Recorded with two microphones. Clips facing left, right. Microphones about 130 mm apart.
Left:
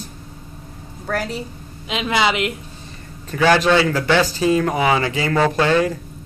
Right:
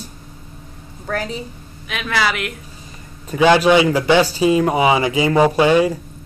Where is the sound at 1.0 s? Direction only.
5° left (ahead or behind).